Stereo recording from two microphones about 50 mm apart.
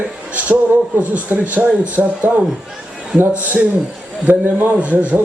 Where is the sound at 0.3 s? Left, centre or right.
Right.